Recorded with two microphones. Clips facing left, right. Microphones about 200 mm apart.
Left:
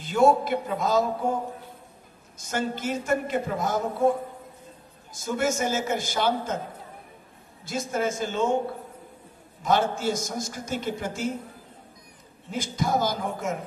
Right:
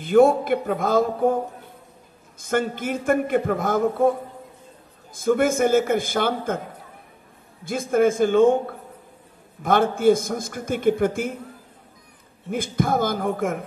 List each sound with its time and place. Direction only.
0.0 s a man's voice: 55° right (ahead or behind)
2.3 s a man's voice: 55° right (ahead or behind)
5.1 s a man's voice: 55° right (ahead or behind)
7.6 s a man's voice: 55° right (ahead or behind)
9.6 s a man's voice: 55° right (ahead or behind)
12.4 s a man's voice: 55° right (ahead or behind)